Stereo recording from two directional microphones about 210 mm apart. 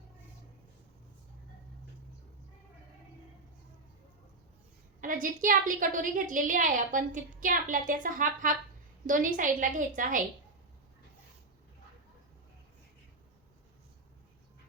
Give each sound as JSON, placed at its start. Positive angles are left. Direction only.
{"t": 4.9, "sound": "a woman's voice", "side_deg": -40}